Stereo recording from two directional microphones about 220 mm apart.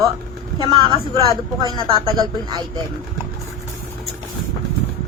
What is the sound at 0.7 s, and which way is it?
Speech, 20° right (ahead or behind).